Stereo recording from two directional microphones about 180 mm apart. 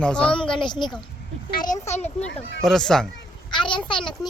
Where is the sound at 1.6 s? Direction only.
45° left (ahead or behind).